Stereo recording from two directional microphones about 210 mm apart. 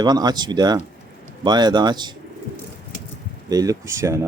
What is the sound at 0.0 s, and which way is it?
A man's voice, 20° right (ahead or behind).